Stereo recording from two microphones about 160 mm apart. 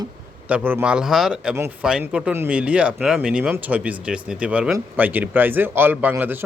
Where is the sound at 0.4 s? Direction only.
10° right (ahead or behind).